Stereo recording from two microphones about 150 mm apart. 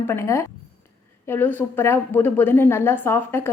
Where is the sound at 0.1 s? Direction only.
20° left (ahead or behind).